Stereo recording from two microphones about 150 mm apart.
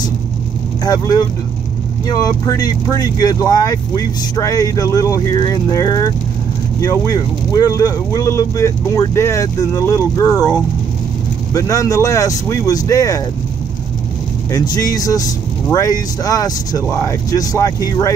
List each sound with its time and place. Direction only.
0.8 s speech: 25° left (ahead or behind)
11.5 s speech: 20° left (ahead or behind)
14.5 s speech: 25° left (ahead or behind)